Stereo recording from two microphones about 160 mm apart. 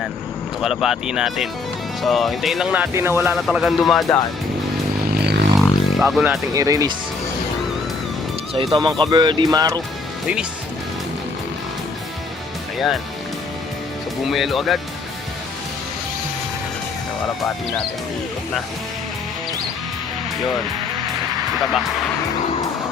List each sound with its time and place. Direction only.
0.6 s speech: centre (ahead or behind)
3.3 s speech: centre (ahead or behind)
5.2 s music: 90° right
5.5 s music: centre (ahead or behind)
6.5 s speech: 20° right (ahead or behind)
8.5 s speech: 30° right (ahead or behind)
14.3 s speech: centre (ahead or behind)